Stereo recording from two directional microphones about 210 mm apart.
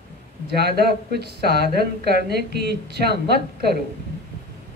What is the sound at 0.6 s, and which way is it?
Speech, 50° right (ahead or behind).